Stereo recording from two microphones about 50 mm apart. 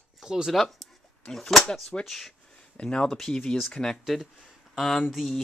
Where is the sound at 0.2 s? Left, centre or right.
Centre.